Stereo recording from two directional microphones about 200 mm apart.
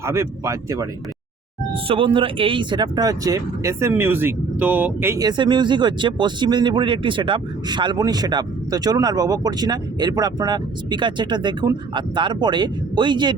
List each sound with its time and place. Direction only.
0.0 s speech: 15° right (ahead or behind)
1.7 s speech: 25° right (ahead or behind)